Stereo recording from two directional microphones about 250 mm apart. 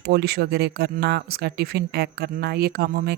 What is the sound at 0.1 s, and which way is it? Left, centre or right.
Speech, right.